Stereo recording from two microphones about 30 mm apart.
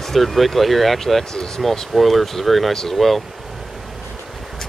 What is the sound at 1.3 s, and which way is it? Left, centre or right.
Speech, left.